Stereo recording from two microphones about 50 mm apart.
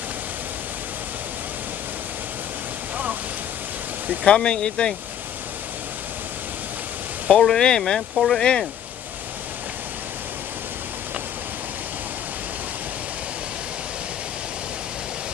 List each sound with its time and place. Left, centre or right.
4.2 s speech: centre
7.2 s speech: centre